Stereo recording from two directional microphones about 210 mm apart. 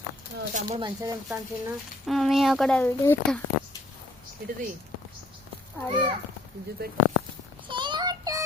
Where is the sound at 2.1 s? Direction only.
Centre (ahead or behind).